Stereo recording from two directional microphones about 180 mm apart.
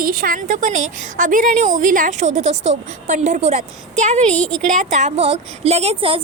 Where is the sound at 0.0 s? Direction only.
50° right (ahead or behind).